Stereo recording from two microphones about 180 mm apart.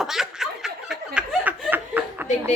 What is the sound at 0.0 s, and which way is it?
Snicker, centre (ahead or behind).